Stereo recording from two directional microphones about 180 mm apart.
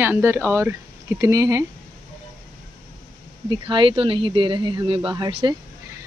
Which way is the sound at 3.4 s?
25° right (ahead or behind).